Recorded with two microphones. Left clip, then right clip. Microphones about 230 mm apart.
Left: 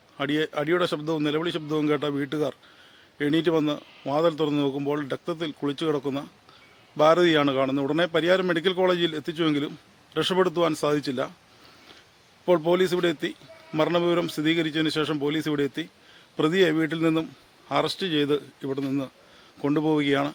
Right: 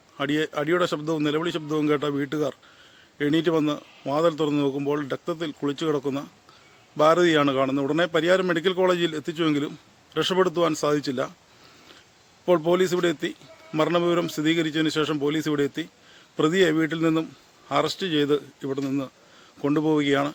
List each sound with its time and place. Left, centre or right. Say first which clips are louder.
0.2 s a man's voice: right 1 dB; centre
12.5 s a man's voice: right 1 dB; centre